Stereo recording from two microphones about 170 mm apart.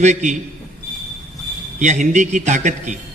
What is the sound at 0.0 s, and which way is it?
Speech, 45° right (ahead or behind).